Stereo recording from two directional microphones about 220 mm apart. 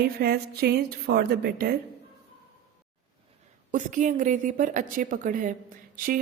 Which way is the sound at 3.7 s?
35° right (ahead or behind).